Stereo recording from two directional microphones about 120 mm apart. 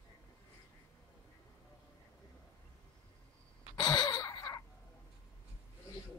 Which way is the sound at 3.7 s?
35° left (ahead or behind).